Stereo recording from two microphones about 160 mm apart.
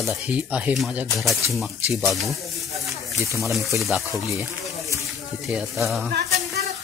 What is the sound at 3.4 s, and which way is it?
Speech, centre (ahead or behind).